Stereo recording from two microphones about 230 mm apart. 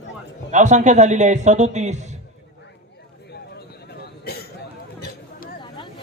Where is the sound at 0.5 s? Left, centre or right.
Right.